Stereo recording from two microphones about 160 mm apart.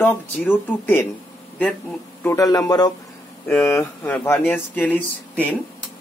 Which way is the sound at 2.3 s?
20° left (ahead or behind).